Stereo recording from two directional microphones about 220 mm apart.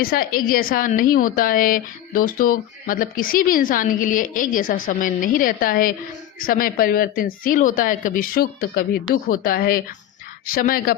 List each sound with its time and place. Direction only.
0.0 s a woman's voice: 40° left (ahead or behind)